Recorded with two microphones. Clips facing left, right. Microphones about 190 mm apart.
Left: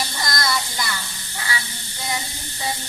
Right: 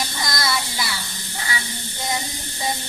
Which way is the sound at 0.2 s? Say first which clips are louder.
Left 1 dB; centre (ahead or behind).